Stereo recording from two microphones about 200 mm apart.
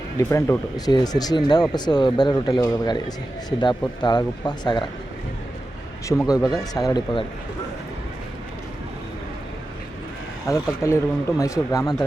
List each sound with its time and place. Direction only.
0.2 s speech: 15° left (ahead or behind)
6.2 s speech: 20° left (ahead or behind)
10.4 s speech: 15° left (ahead or behind)